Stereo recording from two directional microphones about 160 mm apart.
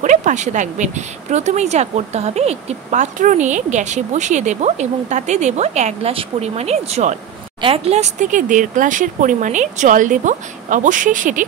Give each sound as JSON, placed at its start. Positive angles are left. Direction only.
{"t": 0.0, "sound": "speech", "side_deg": -50}